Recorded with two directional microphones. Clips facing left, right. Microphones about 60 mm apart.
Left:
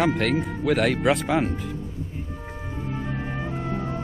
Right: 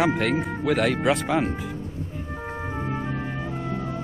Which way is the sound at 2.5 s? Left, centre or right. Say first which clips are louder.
Right 4 dB; right.